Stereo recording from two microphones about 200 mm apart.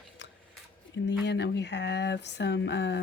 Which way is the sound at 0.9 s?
60° left (ahead or behind).